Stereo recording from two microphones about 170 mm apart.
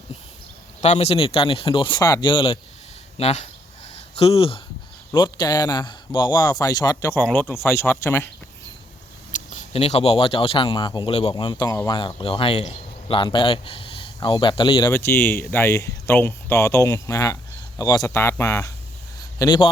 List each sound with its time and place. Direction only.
0.8 s speech: 40° left (ahead or behind); by 7.2 s 20° left (ahead or behind)
7.2 s speech: 10° left (ahead or behind)
9.5 s speech: 40° left (ahead or behind); by 14.9 s 25° left (ahead or behind)
14.9 s speech: 15° left (ahead or behind)
19.4 s speech: 25° left (ahead or behind)